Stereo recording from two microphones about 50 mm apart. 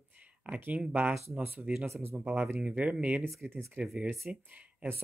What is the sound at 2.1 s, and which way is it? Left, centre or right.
Speech, right.